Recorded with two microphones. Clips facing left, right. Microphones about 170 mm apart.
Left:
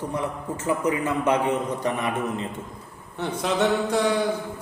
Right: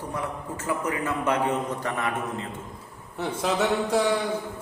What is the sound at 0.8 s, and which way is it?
A man's voice, 20° left (ahead or behind).